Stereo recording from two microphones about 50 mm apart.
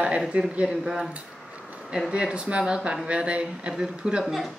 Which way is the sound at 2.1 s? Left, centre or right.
Centre.